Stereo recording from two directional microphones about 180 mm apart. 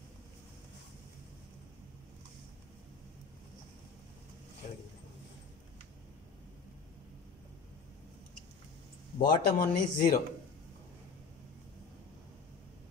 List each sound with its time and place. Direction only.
9.2 s speech: 50° left (ahead or behind)